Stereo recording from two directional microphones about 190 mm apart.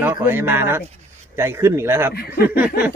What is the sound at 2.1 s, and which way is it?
Speech, 55° left (ahead or behind).